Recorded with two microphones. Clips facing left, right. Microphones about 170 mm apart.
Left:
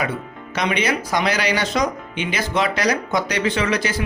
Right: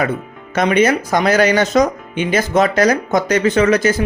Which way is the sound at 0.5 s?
50° right (ahead or behind).